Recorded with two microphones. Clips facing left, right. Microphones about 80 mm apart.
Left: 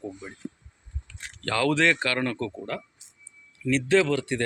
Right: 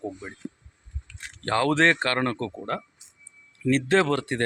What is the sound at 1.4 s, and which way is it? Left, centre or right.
Speech, right.